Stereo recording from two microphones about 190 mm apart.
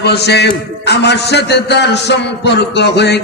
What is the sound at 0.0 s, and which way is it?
A man's voice, 60° left (ahead or behind).